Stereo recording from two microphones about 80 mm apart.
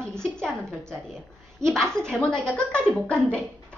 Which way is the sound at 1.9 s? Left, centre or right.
Centre.